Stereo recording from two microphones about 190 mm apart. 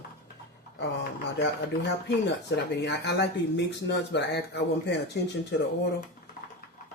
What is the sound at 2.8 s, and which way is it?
Speech, 65° left (ahead or behind).